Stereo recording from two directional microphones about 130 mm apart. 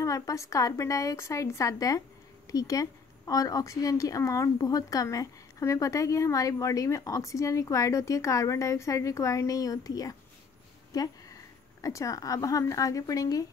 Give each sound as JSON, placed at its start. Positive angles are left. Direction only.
{"t": 0.0, "sound": "a woman's voice", "side_deg": 25}
{"t": 10.9, "sound": "a sound", "side_deg": 30}
{"t": 11.8, "sound": "a woman's voice", "side_deg": 25}